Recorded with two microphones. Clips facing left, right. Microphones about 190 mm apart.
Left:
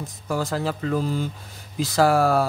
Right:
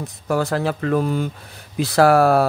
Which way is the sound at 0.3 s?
65° right (ahead or behind).